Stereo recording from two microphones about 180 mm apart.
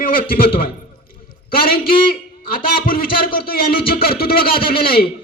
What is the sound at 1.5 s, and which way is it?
A man's voice, 55° left (ahead or behind).